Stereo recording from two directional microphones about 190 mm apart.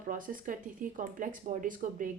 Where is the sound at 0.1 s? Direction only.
45° right (ahead or behind).